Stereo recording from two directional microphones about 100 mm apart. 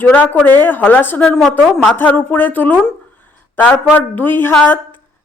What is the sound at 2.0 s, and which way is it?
Speech, 20° left (ahead or behind).